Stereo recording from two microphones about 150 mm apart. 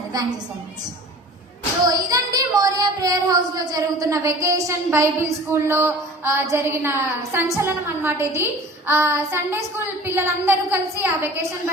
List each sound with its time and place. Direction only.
1.8 s child singing: 25° right (ahead or behind)
7.5 s speech: 15° right (ahead or behind)